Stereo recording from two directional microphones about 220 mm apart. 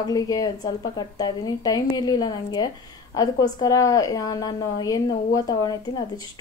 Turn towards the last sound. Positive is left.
turn(degrees=15)  # may be behind; listen again after turning